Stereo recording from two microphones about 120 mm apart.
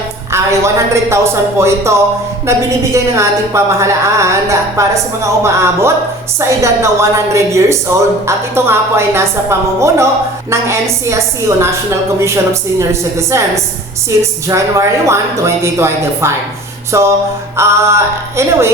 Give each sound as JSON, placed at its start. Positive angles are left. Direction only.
{"t": 0.3, "sound": "a woman's voice", "side_deg": -25}